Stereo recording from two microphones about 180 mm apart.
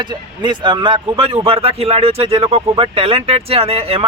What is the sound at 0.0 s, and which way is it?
A man's voice, 25° right (ahead or behind).